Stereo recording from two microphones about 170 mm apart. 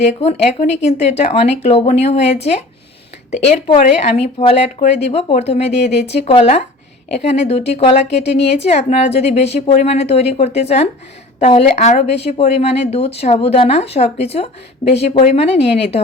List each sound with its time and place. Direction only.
0.0 s speech: 40° left (ahead or behind)